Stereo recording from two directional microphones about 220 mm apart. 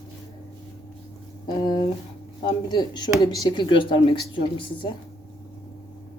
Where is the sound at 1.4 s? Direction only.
20° left (ahead or behind).